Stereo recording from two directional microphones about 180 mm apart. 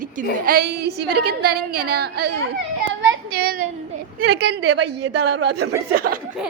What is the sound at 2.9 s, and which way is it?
Child singing, 55° right (ahead or behind).